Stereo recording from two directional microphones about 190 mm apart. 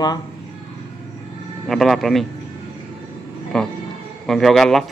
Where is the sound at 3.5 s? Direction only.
5° left (ahead or behind).